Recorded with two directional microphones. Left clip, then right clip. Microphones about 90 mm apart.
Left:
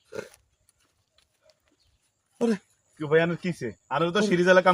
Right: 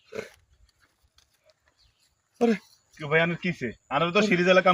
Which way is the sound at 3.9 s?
30° left (ahead or behind).